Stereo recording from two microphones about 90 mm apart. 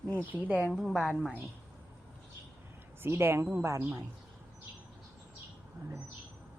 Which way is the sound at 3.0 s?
25° right (ahead or behind).